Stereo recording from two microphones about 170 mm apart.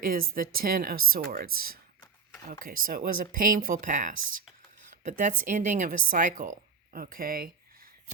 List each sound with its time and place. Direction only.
0.0 s speech: 60° right (ahead or behind)